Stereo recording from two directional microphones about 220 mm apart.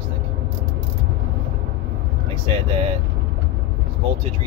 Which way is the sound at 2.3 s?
25° right (ahead or behind).